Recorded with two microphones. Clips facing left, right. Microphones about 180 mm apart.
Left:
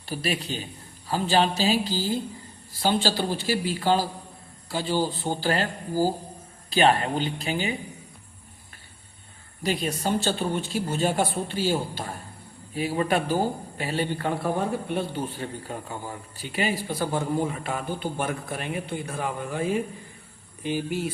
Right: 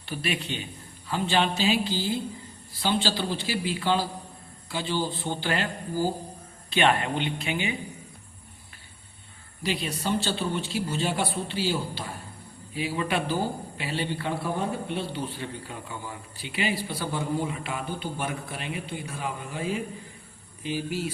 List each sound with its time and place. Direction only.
0.0 s a man's voice: 40° left (ahead or behind)
9.6 s speech: 45° left (ahead or behind)